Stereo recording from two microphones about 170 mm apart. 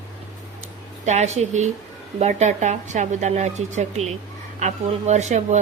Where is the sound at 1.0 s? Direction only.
40° right (ahead or behind).